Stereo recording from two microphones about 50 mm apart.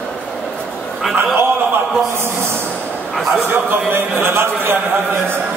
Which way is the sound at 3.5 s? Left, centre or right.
Right.